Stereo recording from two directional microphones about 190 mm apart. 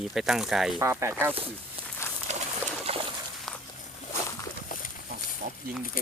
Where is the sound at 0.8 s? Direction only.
15° right (ahead or behind).